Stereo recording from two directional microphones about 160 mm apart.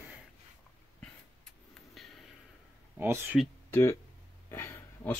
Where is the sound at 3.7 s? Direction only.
15° left (ahead or behind).